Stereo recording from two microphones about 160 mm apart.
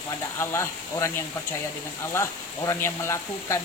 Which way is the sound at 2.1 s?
15° left (ahead or behind).